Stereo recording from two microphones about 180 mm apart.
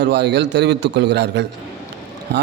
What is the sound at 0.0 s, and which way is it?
A man's voice, 75° right (ahead or behind).